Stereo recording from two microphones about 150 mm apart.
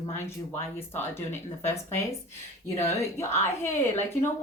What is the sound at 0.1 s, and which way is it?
Speech, 15° left (ahead or behind).